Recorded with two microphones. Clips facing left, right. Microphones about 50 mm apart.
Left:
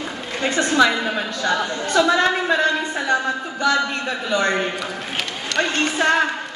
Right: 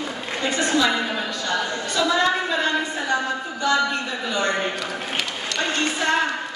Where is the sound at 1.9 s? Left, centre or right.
Left.